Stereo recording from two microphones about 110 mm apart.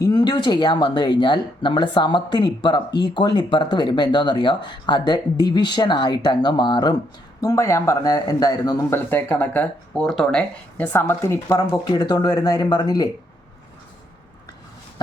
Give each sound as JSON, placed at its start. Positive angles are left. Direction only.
{"t": 0.0, "sound": "speech", "side_deg": 40}
{"t": 7.4, "sound": "speech", "side_deg": 25}
{"t": 8.9, "sound": "speech", "side_deg": 20}
{"t": 10.8, "sound": "speech", "side_deg": 20}